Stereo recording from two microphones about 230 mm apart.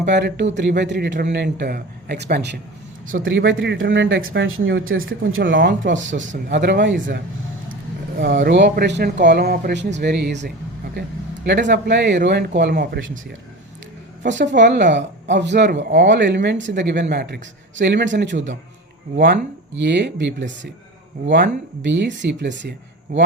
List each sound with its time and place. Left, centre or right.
0.0 s a man's voice: right
8.2 s a man's voice: right
11.7 s a man's voice: right
14.3 s a man's voice: right